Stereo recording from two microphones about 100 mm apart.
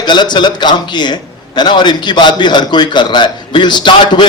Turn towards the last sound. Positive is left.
turn(degrees=50)  # may be behind; listen again after turning